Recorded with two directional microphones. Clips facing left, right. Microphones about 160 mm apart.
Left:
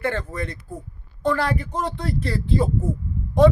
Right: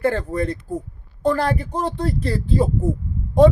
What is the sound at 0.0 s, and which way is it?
Speech, 35° right (ahead or behind).